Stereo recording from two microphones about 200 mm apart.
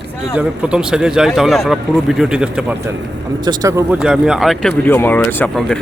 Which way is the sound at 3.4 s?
20° right (ahead or behind).